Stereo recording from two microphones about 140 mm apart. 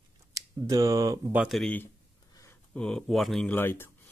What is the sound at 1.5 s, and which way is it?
Speech, 5° left (ahead or behind).